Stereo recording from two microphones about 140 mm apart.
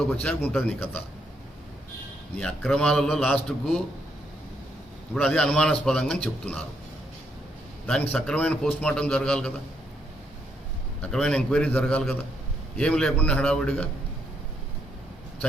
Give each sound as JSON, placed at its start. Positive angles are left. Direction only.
{"t": 0.0, "sound": "a man's voice", "side_deg": 10}
{"t": 2.4, "sound": "a man's voice", "side_deg": 5}
{"t": 5.2, "sound": "a man's voice", "side_deg": 10}
{"t": 7.9, "sound": "a man's voice", "side_deg": 10}
{"t": 11.0, "sound": "a man's voice", "side_deg": 5}